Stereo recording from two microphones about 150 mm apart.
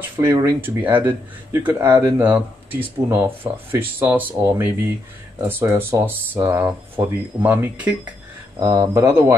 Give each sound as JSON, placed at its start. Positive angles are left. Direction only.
{"t": 0.2, "sound": "speech", "side_deg": -20}
{"t": 8.5, "sound": "speech", "side_deg": -20}